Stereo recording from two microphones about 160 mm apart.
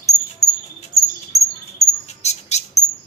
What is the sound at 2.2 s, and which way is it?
Bird, 45° left (ahead or behind).